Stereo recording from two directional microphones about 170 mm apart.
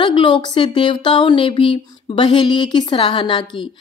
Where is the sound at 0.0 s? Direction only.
30° left (ahead or behind).